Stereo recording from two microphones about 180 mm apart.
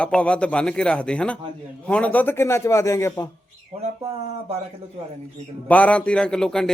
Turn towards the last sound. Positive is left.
turn(degrees=5)  # may be behind; listen again after turning